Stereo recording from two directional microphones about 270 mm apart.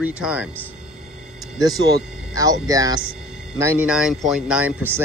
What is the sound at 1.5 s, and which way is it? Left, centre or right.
Speech, centre.